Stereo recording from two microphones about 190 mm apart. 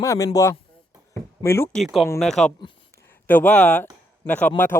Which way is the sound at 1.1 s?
15° left (ahead or behind).